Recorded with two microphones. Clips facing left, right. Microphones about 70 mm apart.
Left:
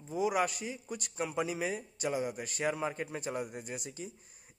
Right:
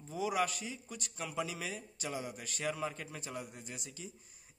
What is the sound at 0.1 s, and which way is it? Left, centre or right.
A man's voice, left.